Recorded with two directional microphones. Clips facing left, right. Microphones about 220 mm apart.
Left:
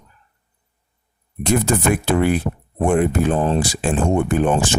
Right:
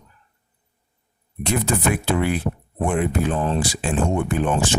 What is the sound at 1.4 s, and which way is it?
Speech, 45° left (ahead or behind).